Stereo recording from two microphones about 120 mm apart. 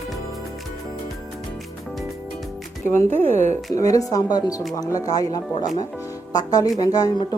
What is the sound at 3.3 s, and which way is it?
Speech, 75° right (ahead or behind).